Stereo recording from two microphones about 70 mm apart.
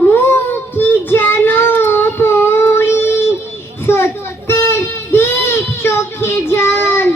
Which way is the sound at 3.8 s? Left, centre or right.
Left.